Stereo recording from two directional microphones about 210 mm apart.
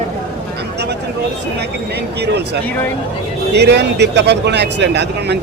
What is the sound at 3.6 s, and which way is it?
Speech, 55° right (ahead or behind).